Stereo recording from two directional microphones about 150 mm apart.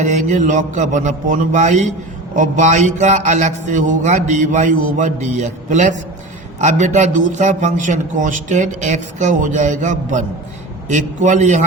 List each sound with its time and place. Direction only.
0.0 s music: 55° right (ahead or behind)
2.3 s a man's voice: 55° right (ahead or behind)
10.8 s music: 55° right (ahead or behind)